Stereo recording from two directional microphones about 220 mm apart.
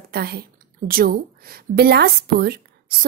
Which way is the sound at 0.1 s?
45° right (ahead or behind).